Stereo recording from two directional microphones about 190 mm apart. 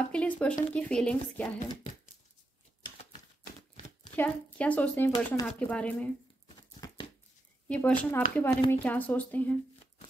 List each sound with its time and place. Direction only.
0.1 s speech: 5° left (ahead or behind)
4.1 s speech: 10° left (ahead or behind)
6.8 s a sound: 20° left (ahead or behind)
7.6 s speech: 5° left (ahead or behind)